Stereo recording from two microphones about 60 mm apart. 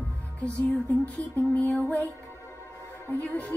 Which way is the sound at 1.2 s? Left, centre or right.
Left.